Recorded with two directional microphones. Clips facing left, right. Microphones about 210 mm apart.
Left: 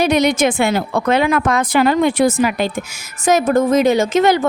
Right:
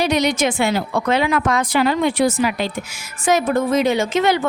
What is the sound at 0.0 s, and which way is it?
A woman's voice, 55° left (ahead or behind).